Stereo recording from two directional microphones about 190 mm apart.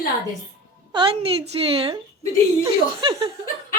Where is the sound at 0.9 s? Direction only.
25° right (ahead or behind).